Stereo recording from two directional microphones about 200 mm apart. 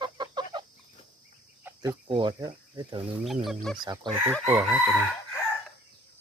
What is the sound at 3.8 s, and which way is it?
Speech, 20° right (ahead or behind).